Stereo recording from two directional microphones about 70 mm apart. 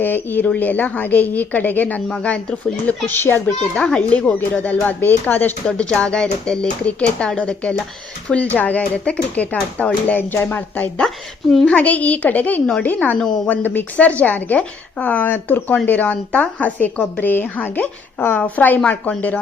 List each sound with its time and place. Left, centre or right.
0.0 s a woman's voice: left
3.1 s a woman's voice: left
3.8 s a woman's voice: centre
5.6 s a woman's voice: centre
13.1 s speech: centre
13.5 s a woman's voice: left